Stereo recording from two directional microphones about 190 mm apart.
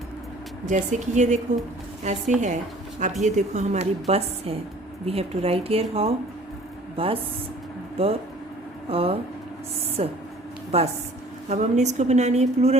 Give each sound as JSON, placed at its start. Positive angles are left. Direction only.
{"t": 0.6, "sound": "a woman's voice", "side_deg": -40}